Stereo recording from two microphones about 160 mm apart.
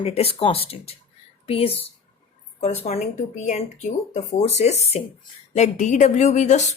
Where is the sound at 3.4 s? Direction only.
45° left (ahead or behind).